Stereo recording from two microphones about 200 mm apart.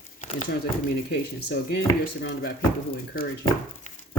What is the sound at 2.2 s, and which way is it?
Speech, 50° left (ahead or behind).